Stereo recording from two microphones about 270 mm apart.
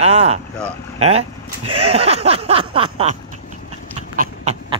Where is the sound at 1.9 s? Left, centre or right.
Right.